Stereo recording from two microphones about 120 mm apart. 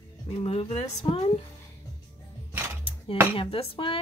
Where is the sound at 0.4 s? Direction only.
55° left (ahead or behind).